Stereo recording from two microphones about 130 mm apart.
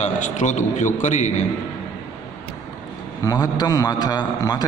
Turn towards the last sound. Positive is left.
turn(degrees=30)  # may be behind; listen again after turning